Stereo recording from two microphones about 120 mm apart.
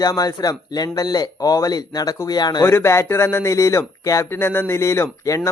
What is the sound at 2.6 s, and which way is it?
Speech, 20° left (ahead or behind).